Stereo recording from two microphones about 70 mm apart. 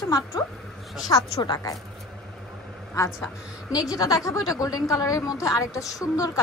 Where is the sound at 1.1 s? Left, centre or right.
Left.